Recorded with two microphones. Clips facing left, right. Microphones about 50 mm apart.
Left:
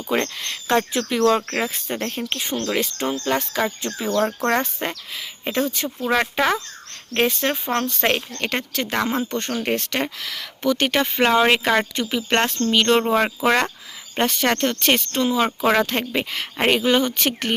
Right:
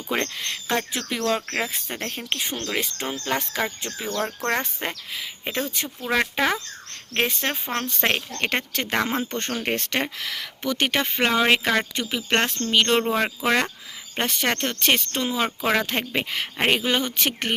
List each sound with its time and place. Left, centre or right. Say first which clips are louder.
0.1 s speech: left 3 dB; centre
8.4 s speech: left 1 dB; right; by 11.0 s centre
11.0 s speech: left 5 dB; centre
13.0 s speech: left 4 dB; centre
14.2 s speech: left 4 dB; centre
15.4 s speech: left 4 dB; centre
15.9 s speech: left 2 dB; centre